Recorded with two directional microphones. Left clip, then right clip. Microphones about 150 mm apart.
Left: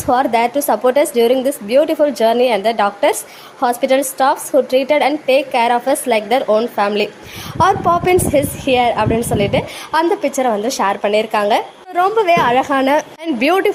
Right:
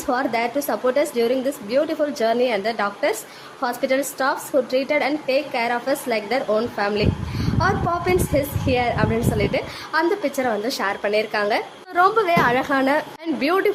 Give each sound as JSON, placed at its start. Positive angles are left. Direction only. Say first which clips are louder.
{"t": 0.0, "sound": "a woman's voice", "louder": "left 8 dB", "side_deg": 25}